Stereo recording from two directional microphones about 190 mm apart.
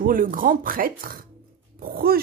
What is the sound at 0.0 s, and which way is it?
Speech, 45° right (ahead or behind).